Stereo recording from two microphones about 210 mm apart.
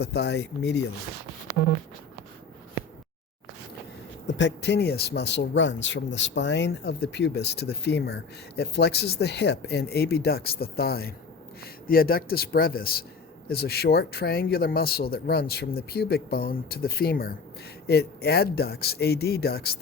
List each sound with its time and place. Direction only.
0.0 s speech: 50° left (ahead or behind)
4.4 s speech: 55° left (ahead or behind)